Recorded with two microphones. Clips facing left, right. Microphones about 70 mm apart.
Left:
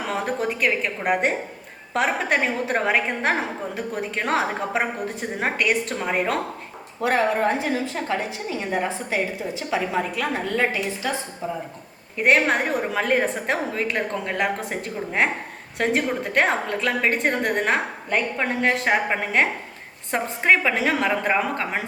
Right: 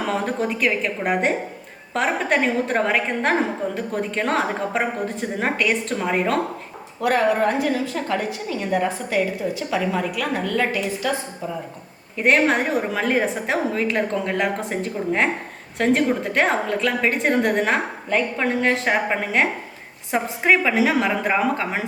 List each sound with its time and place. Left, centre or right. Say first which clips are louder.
0.0 s a woman's voice: right 2 dB; centre
7.0 s a woman's voice: right 2 dB; left
12.1 s a woman's voice: right 1 dB; centre